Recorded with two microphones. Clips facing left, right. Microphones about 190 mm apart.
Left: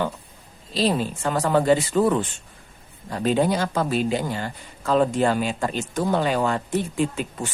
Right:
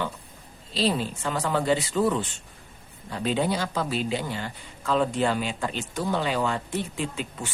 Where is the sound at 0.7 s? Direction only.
45° left (ahead or behind).